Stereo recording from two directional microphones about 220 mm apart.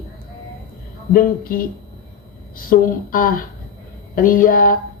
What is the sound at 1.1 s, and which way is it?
Speech, 40° left (ahead or behind).